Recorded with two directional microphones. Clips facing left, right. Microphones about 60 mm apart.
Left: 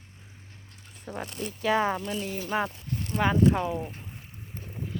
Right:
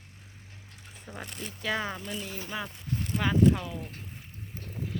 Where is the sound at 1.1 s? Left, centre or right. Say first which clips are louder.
Left 6 dB; centre.